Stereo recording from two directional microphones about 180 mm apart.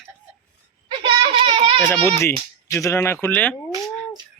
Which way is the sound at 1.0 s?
30° right (ahead or behind).